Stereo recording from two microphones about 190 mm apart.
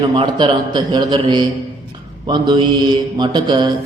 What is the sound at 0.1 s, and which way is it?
Mantra, 25° right (ahead or behind).